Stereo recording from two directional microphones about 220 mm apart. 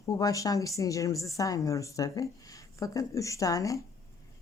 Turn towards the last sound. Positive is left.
turn(degrees=15)  # may be behind; listen again after turning